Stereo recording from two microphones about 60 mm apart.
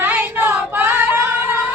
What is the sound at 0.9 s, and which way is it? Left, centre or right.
Singing, right.